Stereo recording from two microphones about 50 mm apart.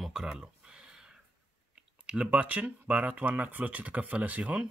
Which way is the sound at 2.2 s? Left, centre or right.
Right.